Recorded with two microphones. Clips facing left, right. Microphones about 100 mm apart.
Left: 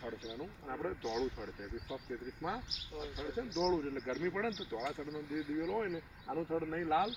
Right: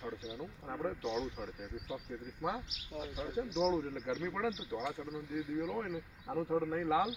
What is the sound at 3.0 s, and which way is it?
Speech, 5° right (ahead or behind).